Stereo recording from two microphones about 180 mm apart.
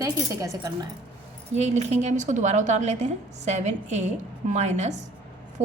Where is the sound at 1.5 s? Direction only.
40° right (ahead or behind).